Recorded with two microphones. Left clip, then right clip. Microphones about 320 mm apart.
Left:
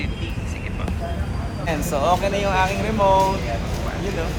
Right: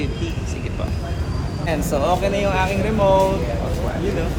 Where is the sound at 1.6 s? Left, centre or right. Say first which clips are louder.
Even; centre.